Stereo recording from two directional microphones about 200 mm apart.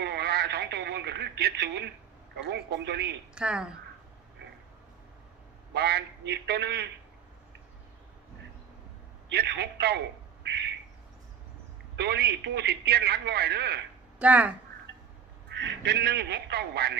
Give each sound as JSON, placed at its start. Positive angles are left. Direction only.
{"t": 0.0, "sound": "radio", "side_deg": -55}
{"t": 2.4, "sound": "a man's voice", "side_deg": -55}
{"t": 3.3, "sound": "a woman's voice", "side_deg": -5}
{"t": 5.7, "sound": "a man's voice", "side_deg": -55}
{"t": 9.3, "sound": "a man's voice", "side_deg": -55}
{"t": 11.9, "sound": "a man's voice", "side_deg": -55}
{"t": 14.2, "sound": "speech", "side_deg": -5}
{"t": 15.4, "sound": "speech", "side_deg": -60}